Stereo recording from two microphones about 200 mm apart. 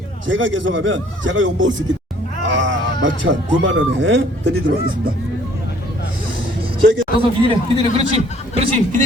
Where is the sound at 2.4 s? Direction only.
70° right (ahead or behind).